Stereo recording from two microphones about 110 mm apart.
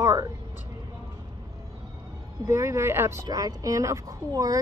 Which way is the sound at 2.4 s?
25° right (ahead or behind).